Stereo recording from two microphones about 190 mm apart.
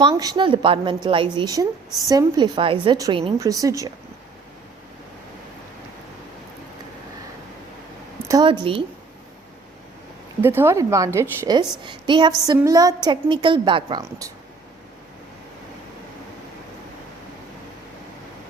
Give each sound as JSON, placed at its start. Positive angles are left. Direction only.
{"t": 0.0, "sound": "a woman's voice", "side_deg": -20}
{"t": 8.3, "sound": "a woman's voice", "side_deg": -20}
{"t": 10.4, "sound": "a woman's voice", "side_deg": -10}